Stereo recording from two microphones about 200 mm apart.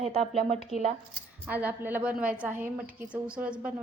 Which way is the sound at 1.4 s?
10° right (ahead or behind).